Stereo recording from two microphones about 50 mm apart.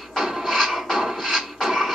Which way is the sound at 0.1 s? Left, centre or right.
Centre.